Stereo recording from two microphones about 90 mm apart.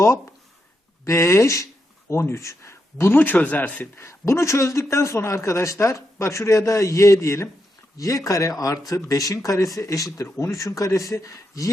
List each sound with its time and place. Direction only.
1.0 s a man's voice: 30° left (ahead or behind)
4.0 s a man's voice: 30° left (ahead or behind)